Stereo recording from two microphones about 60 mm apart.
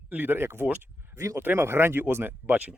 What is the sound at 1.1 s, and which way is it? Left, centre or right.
Speech, right.